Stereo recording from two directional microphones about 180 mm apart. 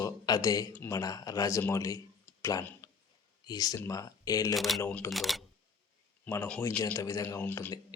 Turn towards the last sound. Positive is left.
turn(degrees=10)  # may be behind; listen again after turning